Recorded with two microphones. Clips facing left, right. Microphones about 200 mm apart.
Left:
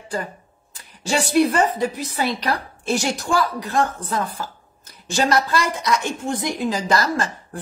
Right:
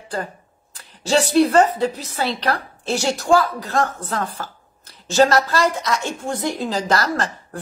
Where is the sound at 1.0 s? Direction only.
15° left (ahead or behind).